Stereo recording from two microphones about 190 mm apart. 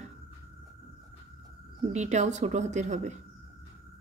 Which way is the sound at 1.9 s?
35° right (ahead or behind).